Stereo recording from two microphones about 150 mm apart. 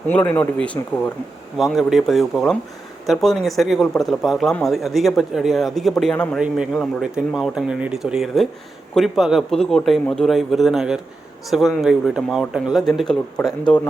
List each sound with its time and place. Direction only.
0.3 s speech: 10° left (ahead or behind)
1.5 s speech: centre (ahead or behind)